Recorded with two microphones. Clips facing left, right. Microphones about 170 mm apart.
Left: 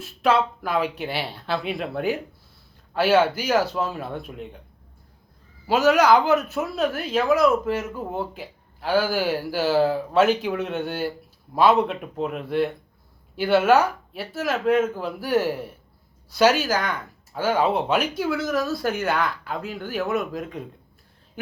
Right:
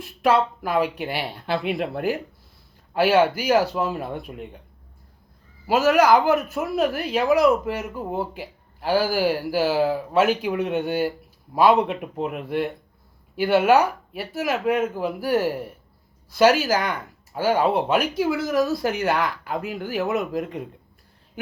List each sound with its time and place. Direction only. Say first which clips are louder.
0.0 s speech: right 1 dB; 10° right (ahead or behind)
5.6 s speech: even; 10° right (ahead or behind)
16.6 s speech: right 2 dB; 10° right (ahead or behind)